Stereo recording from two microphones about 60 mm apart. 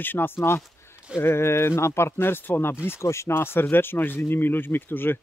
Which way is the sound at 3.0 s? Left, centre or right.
Left.